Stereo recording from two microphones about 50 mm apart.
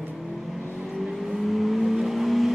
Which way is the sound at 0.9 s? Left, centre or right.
Centre.